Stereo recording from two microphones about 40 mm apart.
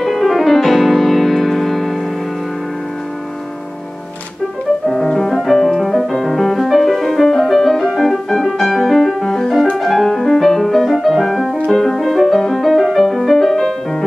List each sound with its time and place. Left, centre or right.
0.0 s music: centre
4.8 s music: centre